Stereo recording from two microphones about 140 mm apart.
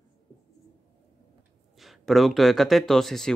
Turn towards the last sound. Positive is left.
turn(degrees=5)  # may be behind; listen again after turning